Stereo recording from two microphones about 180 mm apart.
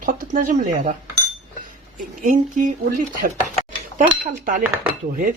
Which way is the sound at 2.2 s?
50° right (ahead or behind).